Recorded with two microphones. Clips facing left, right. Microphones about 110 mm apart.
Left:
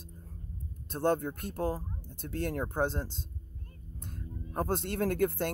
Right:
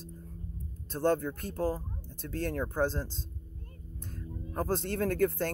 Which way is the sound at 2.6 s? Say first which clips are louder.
Right 2 dB; 20° left (ahead or behind).